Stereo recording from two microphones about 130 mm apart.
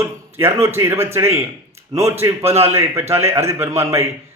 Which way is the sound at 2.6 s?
20° right (ahead or behind).